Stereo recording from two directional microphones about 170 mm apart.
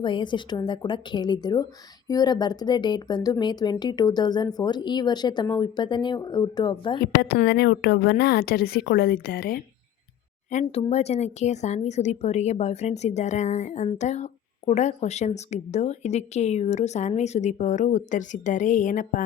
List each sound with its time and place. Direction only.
0.0 s speech: 30° left (ahead or behind)
7.0 s a woman's voice: 65° left (ahead or behind)
10.5 s a woman's voice: 40° left (ahead or behind)